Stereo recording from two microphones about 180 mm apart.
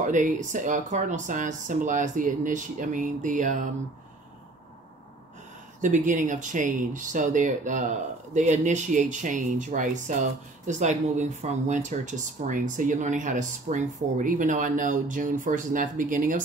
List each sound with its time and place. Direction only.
0.0 s speech: 45° right (ahead or behind)
6.0 s speech: 45° right (ahead or behind)